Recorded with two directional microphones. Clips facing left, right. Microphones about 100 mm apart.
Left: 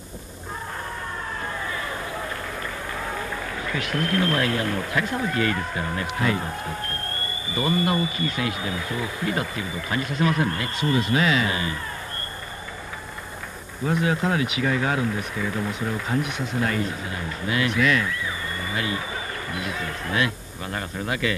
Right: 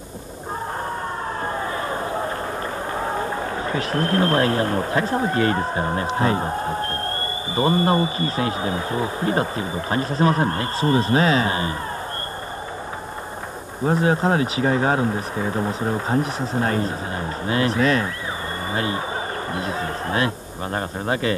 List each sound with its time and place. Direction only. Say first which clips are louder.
1.4 s a sound: right 6 dB; 35° right (ahead or behind)
2.9 s a man's voice: right 7 dB; 35° right (ahead or behind)
13.8 s speech: right 4 dB; 35° right (ahead or behind)